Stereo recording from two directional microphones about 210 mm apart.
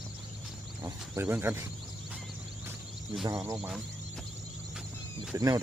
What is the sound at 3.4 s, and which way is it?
Speech, 15° right (ahead or behind).